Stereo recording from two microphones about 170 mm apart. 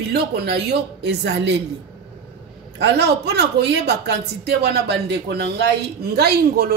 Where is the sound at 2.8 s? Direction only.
80° right.